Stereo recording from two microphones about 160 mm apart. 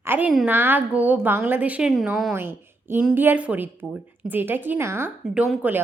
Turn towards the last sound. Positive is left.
turn(degrees=-10)  # may be behind; listen again after turning